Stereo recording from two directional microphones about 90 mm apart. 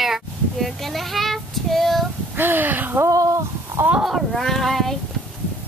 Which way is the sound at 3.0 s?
35° right (ahead or behind).